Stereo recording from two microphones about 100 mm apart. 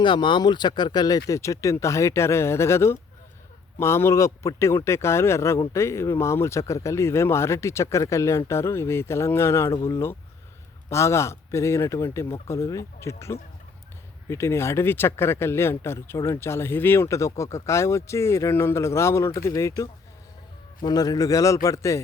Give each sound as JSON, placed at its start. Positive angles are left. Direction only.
{"t": 0.0, "sound": "speech", "side_deg": 50}
{"t": 20.8, "sound": "speech", "side_deg": 40}